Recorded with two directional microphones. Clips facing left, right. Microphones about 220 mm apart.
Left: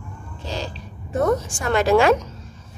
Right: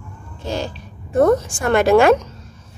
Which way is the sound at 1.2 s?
55° right (ahead or behind).